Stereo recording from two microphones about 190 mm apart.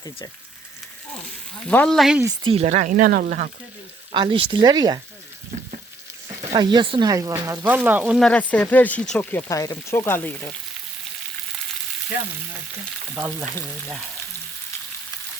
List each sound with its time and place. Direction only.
1.6 s speech: 5° left (ahead or behind)
2.2 s speech: 30° right (ahead or behind); by 3.5 s 45° right (ahead or behind)
4.1 s speech: 25° right (ahead or behind)
6.5 s speech: 25° right (ahead or behind); by 8.3 s 5° right (ahead or behind)
8.3 s speech: 10° left (ahead or behind)
13.2 s speech: centre (ahead or behind)